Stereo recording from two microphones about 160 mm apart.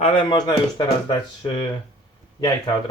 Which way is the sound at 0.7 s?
30° left (ahead or behind).